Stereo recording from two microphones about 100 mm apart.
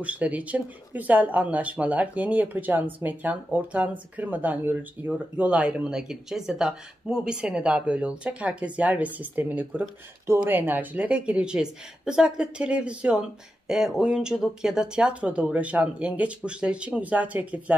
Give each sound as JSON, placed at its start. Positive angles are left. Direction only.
{"t": 0.0, "sound": "speech", "side_deg": -15}